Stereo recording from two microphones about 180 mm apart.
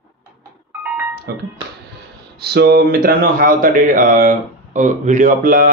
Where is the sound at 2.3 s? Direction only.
65° right (ahead or behind).